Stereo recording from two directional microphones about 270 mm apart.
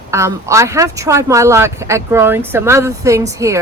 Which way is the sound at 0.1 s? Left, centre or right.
Centre.